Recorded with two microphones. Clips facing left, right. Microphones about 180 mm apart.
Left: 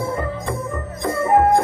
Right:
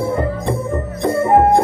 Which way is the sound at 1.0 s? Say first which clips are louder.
Right 3 dB; 30° right (ahead or behind).